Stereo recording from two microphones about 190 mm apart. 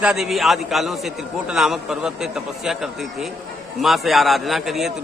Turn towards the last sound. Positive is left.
turn(degrees=0)  # may be behind; listen again after turning